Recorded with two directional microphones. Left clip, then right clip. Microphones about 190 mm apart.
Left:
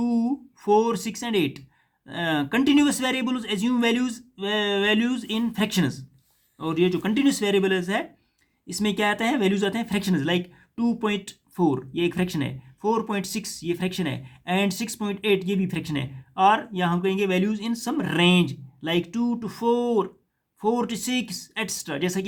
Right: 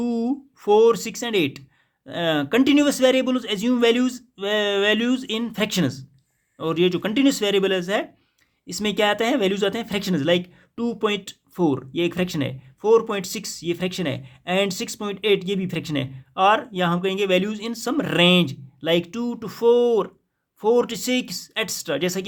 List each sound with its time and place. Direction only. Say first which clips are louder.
0.0 s speech: right 1 dB; 40° right (ahead or behind)